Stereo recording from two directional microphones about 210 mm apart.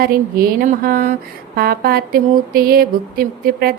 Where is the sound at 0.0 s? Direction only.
45° right (ahead or behind).